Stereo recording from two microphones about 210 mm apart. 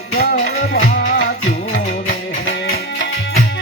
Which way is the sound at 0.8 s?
35° left (ahead or behind).